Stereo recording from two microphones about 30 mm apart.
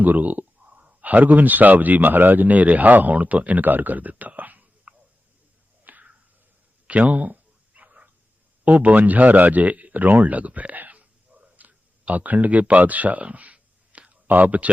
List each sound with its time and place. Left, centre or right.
0.0 s speech: right
4.4 s whispering: right
5.8 s a sound: right
7.0 s speech: right
7.8 s dog: right
8.6 s speech: right
11.5 s a sound: right
14.3 s speech: right